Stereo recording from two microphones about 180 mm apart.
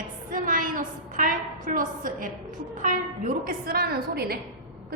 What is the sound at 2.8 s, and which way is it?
A woman's voice, 50° right (ahead or behind).